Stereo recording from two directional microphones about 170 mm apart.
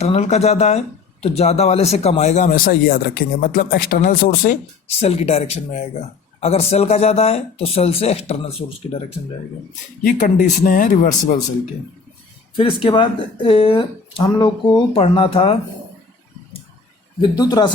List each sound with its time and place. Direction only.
0.0 s speech: 40° left (ahead or behind); by 4.5 s 60° left (ahead or behind)
4.9 s speech: 35° left (ahead or behind)
10.0 s speech: 50° left (ahead or behind)
12.5 s speech: 30° left (ahead or behind)
17.2 s speech: 20° left (ahead or behind)